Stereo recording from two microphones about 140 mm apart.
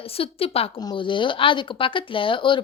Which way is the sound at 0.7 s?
35° left (ahead or behind).